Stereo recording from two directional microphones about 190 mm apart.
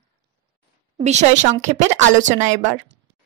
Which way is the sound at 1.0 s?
35° right (ahead or behind).